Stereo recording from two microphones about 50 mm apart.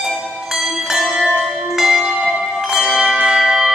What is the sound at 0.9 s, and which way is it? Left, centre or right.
Church bell, centre.